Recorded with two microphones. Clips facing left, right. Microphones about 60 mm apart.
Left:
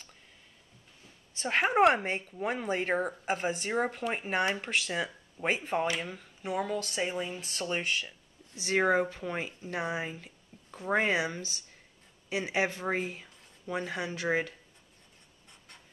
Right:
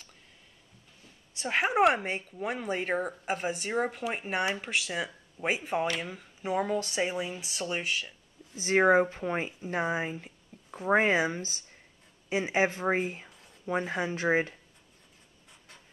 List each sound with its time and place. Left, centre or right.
1.3 s speech: centre
8.6 s speech: centre
9.5 s speech: centre
12.4 s speech: right
13.7 s speech: centre
14.1 s speech: right